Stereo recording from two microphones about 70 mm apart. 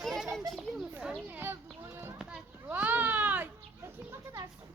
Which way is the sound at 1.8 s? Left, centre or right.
Right.